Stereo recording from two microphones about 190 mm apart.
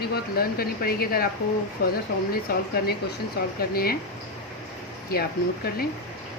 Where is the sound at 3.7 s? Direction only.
50° left (ahead or behind).